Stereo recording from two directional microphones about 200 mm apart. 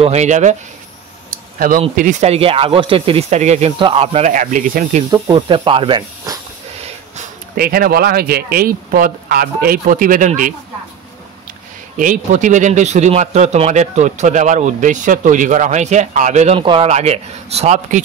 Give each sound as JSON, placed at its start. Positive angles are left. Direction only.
{"t": 0.0, "sound": "speech", "side_deg": -35}
{"t": 2.0, "sound": "speech", "side_deg": -35}
{"t": 5.1, "sound": "speech", "side_deg": -25}
{"t": 7.2, "sound": "speech", "side_deg": -50}
{"t": 12.0, "sound": "speech", "side_deg": -40}